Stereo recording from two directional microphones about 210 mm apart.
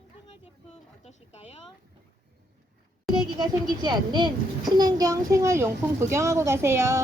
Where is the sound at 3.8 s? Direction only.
20° right (ahead or behind).